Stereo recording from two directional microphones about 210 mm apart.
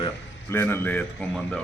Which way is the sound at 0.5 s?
10° left (ahead or behind).